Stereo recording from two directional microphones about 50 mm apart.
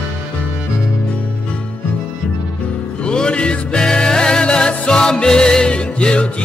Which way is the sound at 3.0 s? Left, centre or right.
Centre.